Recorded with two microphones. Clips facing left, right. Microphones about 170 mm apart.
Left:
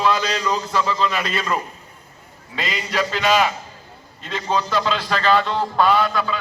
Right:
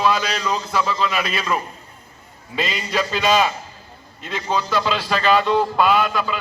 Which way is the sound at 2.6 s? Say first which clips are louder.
Right 2 dB; 15° left (ahead or behind).